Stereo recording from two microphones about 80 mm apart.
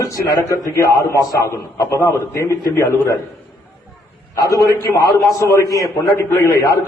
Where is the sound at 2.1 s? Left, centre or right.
Left.